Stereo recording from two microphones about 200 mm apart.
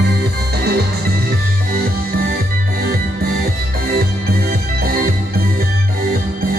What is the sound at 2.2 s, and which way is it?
Music, 45° right (ahead or behind).